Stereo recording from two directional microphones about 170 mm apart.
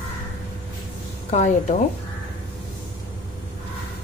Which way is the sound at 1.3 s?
40° left (ahead or behind).